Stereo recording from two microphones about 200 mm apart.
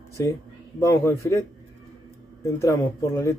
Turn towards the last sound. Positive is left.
turn(degrees=15)  # may be behind; listen again after turning